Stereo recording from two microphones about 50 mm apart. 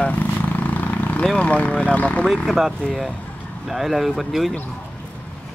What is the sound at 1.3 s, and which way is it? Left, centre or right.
Speech, left.